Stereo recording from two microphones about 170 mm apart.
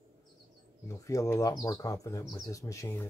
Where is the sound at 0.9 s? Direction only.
20° left (ahead or behind).